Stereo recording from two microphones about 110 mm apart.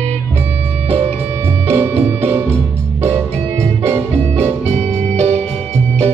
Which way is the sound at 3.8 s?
20° right (ahead or behind).